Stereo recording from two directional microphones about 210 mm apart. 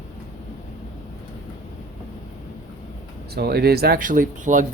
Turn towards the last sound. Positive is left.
turn(degrees=-40)  # may be behind; listen again after turning